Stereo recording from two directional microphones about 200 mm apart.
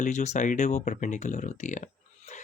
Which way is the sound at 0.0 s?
35° left (ahead or behind).